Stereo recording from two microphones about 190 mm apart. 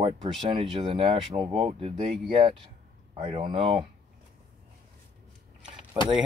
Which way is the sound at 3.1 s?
30° right (ahead or behind).